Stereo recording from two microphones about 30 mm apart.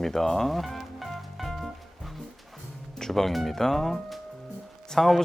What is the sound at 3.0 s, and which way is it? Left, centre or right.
Speech, centre.